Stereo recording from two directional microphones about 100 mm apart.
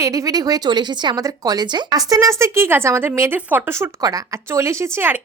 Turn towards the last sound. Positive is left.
turn(degrees=-20)  # may be behind; listen again after turning